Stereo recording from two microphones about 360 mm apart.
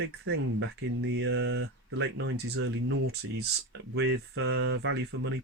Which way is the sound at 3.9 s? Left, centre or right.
Right.